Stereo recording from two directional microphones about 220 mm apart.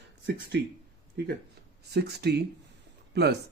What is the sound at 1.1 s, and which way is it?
Speech, 50° right (ahead or behind).